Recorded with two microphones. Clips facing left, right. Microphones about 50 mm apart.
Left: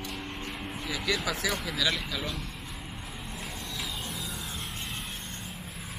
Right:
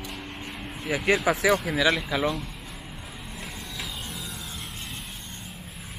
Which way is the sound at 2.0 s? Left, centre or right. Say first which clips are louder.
Right 9 dB; right.